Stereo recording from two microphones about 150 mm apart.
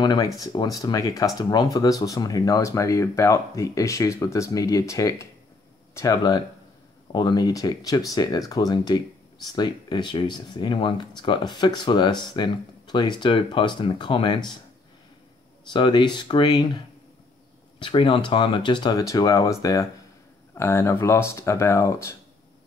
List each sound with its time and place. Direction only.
0.0 s speech: 25° left (ahead or behind)
15.7 s speech: 30° left (ahead or behind)